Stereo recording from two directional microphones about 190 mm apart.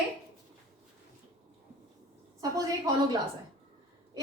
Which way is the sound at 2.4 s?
20° right (ahead or behind).